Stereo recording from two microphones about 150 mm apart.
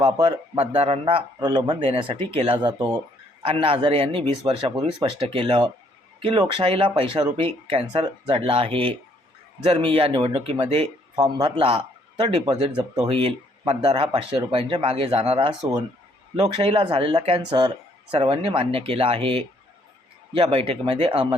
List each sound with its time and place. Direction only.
0.0 s speech: 35° right (ahead or behind)